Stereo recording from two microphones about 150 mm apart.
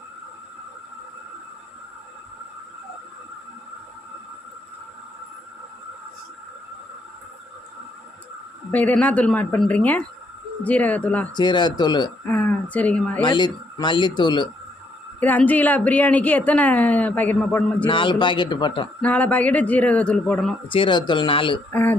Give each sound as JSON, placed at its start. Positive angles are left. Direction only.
{"t": 8.7, "sound": "a woman's voice", "side_deg": 10}
{"t": 11.3, "sound": "speech", "side_deg": 30}
{"t": 12.2, "sound": "a woman's voice", "side_deg": 15}
{"t": 13.2, "sound": "speech", "side_deg": 30}
{"t": 15.2, "sound": "a woman's voice", "side_deg": 10}
{"t": 17.8, "sound": "speech", "side_deg": 35}
{"t": 19.0, "sound": "a woman's voice", "side_deg": 10}
{"t": 20.7, "sound": "speech", "side_deg": 35}
{"t": 21.7, "sound": "a woman's voice", "side_deg": 15}